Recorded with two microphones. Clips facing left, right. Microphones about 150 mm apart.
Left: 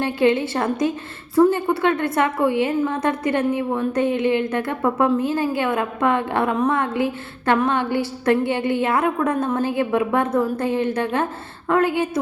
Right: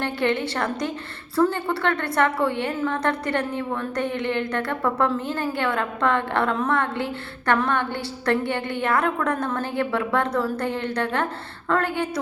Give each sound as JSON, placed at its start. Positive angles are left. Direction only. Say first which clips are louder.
{"t": 0.0, "sound": "a woman's voice", "louder": "left 5 dB", "side_deg": 20}